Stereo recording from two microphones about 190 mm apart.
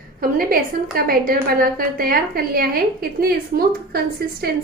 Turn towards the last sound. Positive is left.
turn(degrees=-55)  # may be behind; listen again after turning